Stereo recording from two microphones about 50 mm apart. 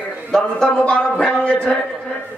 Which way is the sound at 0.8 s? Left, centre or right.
Left.